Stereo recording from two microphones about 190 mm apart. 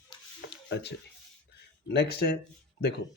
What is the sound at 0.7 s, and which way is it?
Speech, 60° left (ahead or behind).